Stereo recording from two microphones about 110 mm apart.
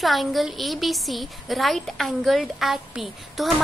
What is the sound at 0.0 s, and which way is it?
Speech, centre (ahead or behind).